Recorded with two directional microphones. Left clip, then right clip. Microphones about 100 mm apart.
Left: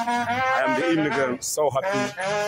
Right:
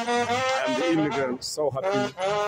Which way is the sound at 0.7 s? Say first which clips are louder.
Left 2 dB; 5° right (ahead or behind).